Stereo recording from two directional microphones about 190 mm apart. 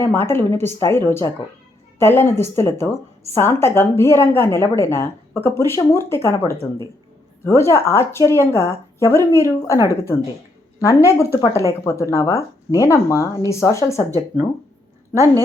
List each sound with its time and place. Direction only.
0.0 s a woman's voice: 10° left (ahead or behind)